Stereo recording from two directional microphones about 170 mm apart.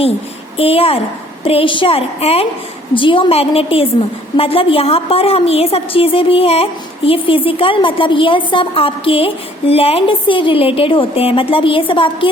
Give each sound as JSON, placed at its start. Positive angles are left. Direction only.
{"t": 0.5, "sound": "a woman's voice", "side_deg": 35}